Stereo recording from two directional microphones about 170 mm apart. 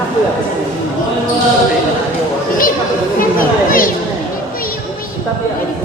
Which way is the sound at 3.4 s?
55° left (ahead or behind).